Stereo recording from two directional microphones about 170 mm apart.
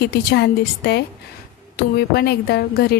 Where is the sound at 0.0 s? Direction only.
70° left (ahead or behind).